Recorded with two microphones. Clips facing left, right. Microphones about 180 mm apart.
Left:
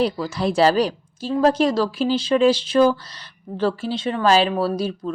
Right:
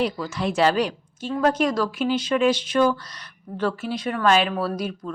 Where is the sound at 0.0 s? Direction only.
35° left (ahead or behind).